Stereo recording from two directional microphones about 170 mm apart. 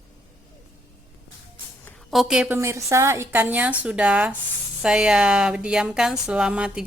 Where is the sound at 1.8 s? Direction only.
Centre (ahead or behind).